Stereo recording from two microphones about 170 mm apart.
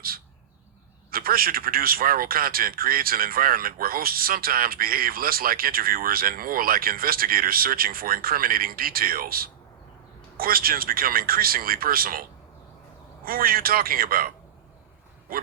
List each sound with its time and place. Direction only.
1.1 s a man's voice: 60° right (ahead or behind)
13.2 s a man's voice: 60° right (ahead or behind)